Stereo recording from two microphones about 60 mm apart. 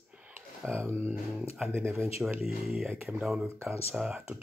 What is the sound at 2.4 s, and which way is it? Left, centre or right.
Speech, centre.